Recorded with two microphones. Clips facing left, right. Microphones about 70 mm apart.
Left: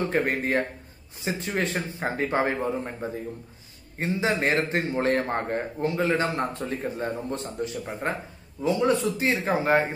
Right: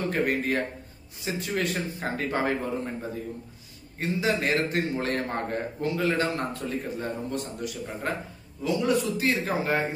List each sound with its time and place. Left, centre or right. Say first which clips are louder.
0.1 s a man's voice: left 1 dB; left